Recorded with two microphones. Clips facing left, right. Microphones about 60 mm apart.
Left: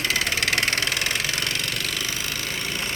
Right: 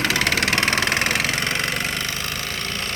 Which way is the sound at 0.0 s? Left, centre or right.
Right.